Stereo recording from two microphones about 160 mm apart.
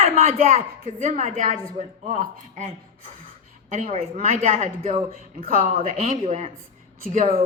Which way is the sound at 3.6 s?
55° right (ahead or behind).